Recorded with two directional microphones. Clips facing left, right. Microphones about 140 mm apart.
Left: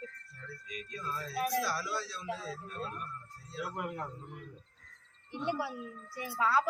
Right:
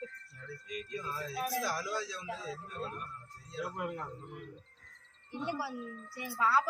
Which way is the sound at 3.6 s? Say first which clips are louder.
Even; 10° left (ahead or behind).